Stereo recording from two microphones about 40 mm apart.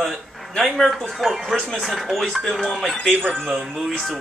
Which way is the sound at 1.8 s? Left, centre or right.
Centre.